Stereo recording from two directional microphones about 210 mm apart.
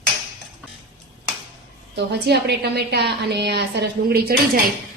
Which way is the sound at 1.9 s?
50° right (ahead or behind).